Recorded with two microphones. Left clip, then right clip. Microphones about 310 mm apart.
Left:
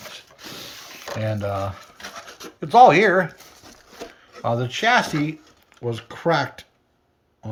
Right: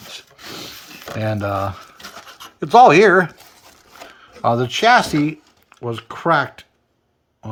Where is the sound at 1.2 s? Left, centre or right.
Right.